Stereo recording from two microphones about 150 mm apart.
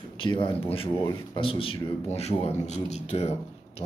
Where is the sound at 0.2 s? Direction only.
35° left (ahead or behind).